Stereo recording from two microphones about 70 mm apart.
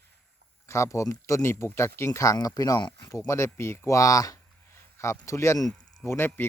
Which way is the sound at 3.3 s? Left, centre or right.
Left.